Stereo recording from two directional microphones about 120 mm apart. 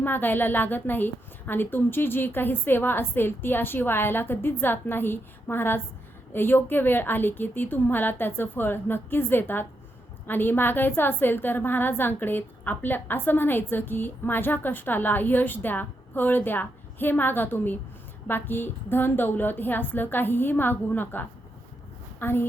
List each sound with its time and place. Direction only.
0.0 s a woman's voice: 15° left (ahead or behind)